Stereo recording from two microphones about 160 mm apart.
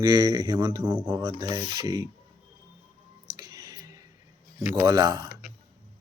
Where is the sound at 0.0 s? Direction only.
25° right (ahead or behind).